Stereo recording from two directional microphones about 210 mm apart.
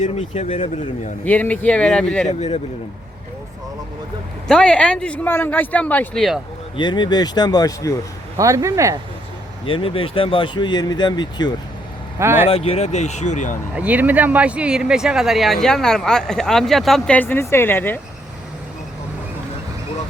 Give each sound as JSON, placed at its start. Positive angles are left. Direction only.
{"t": 0.0, "sound": "speech", "side_deg": 35}
{"t": 1.2, "sound": "speech", "side_deg": 10}
{"t": 2.2, "sound": "speech", "side_deg": 30}
{"t": 4.4, "sound": "speech", "side_deg": 5}
{"t": 6.7, "sound": "speech", "side_deg": 20}
{"t": 8.4, "sound": "speech", "side_deg": -15}
{"t": 9.6, "sound": "speech", "side_deg": 25}
{"t": 12.2, "sound": "speech", "side_deg": -10}
{"t": 12.5, "sound": "speech", "side_deg": 25}
{"t": 13.7, "sound": "speech", "side_deg": -5}